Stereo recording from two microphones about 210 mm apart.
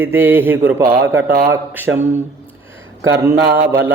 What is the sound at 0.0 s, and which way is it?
Speech, 10° right (ahead or behind).